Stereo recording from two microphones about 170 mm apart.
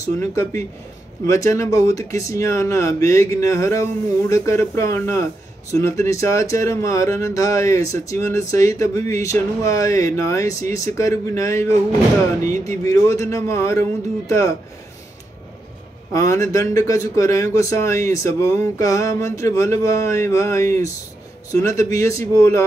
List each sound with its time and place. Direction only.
0.2 s speech: 15° left (ahead or behind)
16.1 s speech: 15° left (ahead or behind)